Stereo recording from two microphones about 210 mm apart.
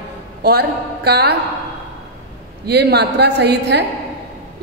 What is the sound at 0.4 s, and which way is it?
Speech, 50° right (ahead or behind).